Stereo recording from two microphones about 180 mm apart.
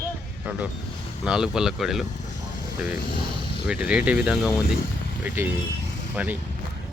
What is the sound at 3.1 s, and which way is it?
Speech, 25° left (ahead or behind).